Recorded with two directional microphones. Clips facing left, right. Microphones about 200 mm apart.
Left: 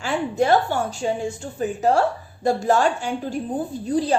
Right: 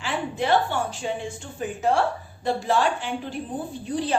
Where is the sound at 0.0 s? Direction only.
45° left (ahead or behind).